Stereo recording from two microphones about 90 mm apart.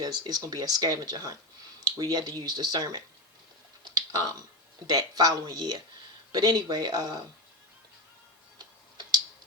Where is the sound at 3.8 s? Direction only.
45° right (ahead or behind).